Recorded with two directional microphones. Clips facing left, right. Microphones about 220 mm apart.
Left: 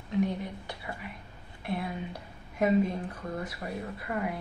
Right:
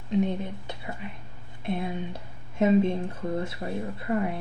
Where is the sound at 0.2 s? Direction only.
20° right (ahead or behind).